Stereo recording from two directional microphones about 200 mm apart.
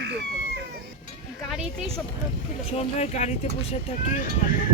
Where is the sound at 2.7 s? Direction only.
35° left (ahead or behind).